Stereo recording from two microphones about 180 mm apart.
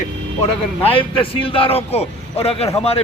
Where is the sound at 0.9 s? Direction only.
30° left (ahead or behind).